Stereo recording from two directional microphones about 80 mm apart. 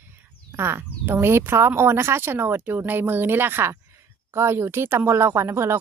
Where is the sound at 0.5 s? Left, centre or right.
Right.